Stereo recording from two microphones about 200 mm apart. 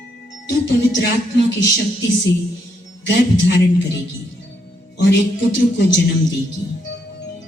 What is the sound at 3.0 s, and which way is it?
Speech, 60° left (ahead or behind).